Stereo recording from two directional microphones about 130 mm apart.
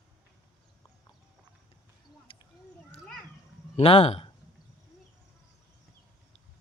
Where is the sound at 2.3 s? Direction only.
40° left (ahead or behind).